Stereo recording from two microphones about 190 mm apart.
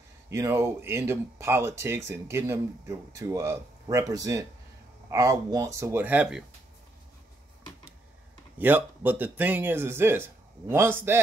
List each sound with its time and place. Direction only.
0.3 s speech: 15° right (ahead or behind)
8.5 s speech: 10° right (ahead or behind)